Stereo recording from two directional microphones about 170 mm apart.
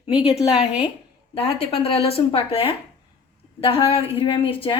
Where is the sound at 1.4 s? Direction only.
35° left (ahead or behind).